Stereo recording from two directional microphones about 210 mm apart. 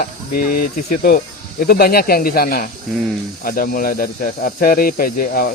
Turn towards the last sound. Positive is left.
turn(degrees=45)  # may be behind; listen again after turning